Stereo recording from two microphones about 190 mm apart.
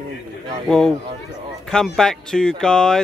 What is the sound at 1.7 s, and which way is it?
Speech, centre (ahead or behind).